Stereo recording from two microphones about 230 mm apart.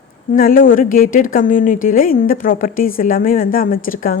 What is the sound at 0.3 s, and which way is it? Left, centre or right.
A woman's voice, left.